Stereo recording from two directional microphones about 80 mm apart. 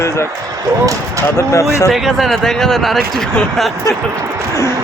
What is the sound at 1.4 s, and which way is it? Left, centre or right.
Speech, left.